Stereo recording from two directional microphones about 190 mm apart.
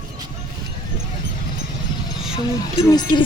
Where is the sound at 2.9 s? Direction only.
20° left (ahead or behind).